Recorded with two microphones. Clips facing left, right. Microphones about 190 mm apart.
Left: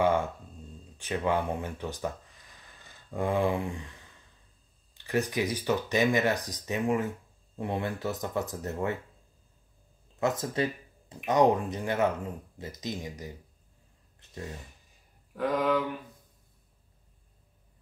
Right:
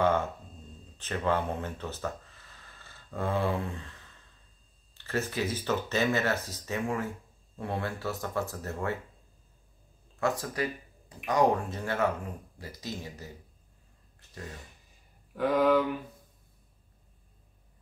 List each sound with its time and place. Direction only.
0.0 s speech: 10° left (ahead or behind)
10.2 s speech: 20° left (ahead or behind)
15.3 s a sound: centre (ahead or behind)